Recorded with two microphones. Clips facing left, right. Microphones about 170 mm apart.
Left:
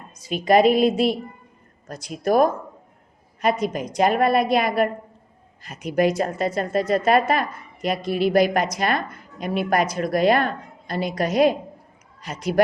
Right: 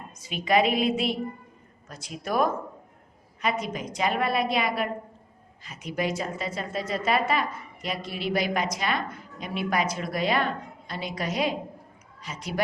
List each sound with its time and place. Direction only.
0.3 s speech: 40° left (ahead or behind)
3.9 s speech: 45° left (ahead or behind)